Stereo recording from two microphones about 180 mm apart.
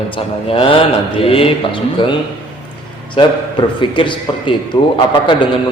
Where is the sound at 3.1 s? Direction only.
25° left (ahead or behind).